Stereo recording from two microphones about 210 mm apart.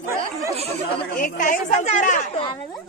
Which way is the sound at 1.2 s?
40° left (ahead or behind).